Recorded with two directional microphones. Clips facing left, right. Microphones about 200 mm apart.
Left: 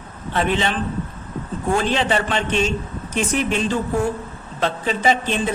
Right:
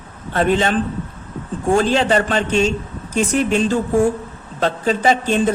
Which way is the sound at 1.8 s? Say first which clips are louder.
Right 5 dB; 40° right (ahead or behind).